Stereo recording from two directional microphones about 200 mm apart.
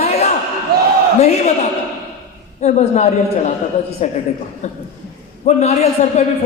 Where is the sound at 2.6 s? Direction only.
35° left (ahead or behind).